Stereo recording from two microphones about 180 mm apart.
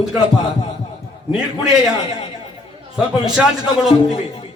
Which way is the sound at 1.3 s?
5° right (ahead or behind).